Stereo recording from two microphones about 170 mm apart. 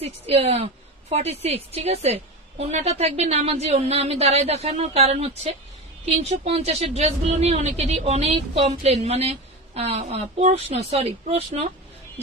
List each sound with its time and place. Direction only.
0.0 s a woman's voice: 35° right (ahead or behind)